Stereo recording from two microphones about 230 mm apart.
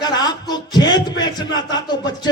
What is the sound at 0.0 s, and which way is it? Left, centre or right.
Music, centre.